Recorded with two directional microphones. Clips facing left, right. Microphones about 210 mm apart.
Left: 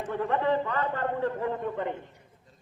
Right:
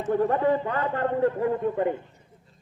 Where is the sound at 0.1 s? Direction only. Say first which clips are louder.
Right 5 dB; 40° right (ahead or behind).